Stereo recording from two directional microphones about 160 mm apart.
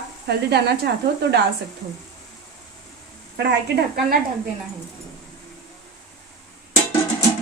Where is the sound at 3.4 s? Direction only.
90° right.